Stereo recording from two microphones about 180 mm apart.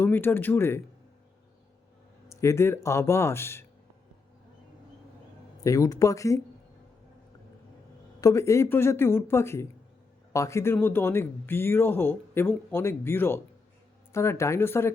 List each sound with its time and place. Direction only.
0.0 s speech: 10° left (ahead or behind)
2.3 s speech: 15° left (ahead or behind)
5.6 s speech: 20° left (ahead or behind)
8.2 s speech: 15° left (ahead or behind)